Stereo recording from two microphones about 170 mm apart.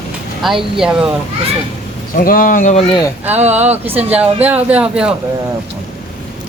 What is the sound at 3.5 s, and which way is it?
Speech, 10° right (ahead or behind).